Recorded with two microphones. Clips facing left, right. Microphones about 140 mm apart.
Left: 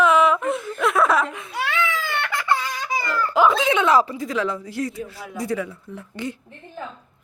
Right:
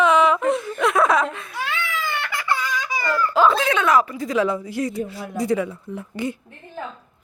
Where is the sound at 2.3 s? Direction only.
30° left (ahead or behind).